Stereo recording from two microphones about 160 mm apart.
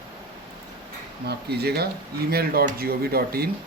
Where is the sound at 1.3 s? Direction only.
90° right.